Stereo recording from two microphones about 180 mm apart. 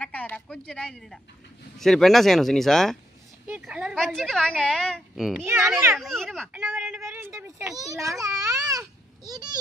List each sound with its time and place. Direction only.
0.0 s a woman's voice: 10° left (ahead or behind); by 3.9 s 5° right (ahead or behind)
3.9 s a woman's voice: 5° left (ahead or behind)
5.4 s a child's voice: 15° right (ahead or behind)
5.9 s a woman's voice: centre (ahead or behind)
6.5 s a child's voice: 10° right (ahead or behind)